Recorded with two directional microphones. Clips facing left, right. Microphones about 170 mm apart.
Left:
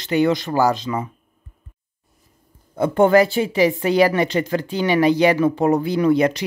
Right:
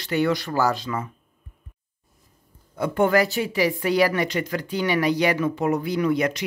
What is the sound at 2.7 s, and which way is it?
Speech, 25° left (ahead or behind).